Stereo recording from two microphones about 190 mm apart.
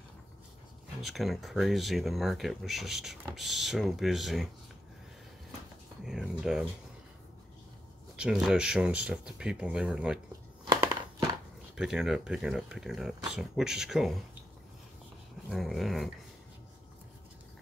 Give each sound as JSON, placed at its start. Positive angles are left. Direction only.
{"t": 1.0, "sound": "speech", "side_deg": 0}
{"t": 6.0, "sound": "speech", "side_deg": -5}
{"t": 8.2, "sound": "speech", "side_deg": -5}
{"t": 10.7, "sound": "crumpling", "side_deg": -20}
{"t": 11.7, "sound": "speech", "side_deg": -5}
{"t": 15.5, "sound": "speech", "side_deg": 0}